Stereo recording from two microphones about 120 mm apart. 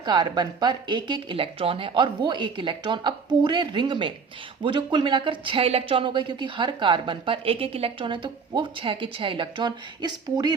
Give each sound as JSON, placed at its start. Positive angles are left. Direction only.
{"t": 0.0, "sound": "speech", "side_deg": -35}